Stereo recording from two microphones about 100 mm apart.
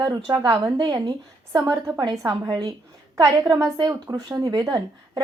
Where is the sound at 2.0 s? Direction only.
45° right (ahead or behind).